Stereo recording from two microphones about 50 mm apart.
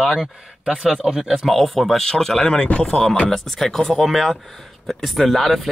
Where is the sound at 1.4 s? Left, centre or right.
Centre.